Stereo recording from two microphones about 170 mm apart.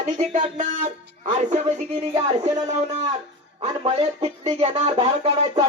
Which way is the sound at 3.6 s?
30° right (ahead or behind).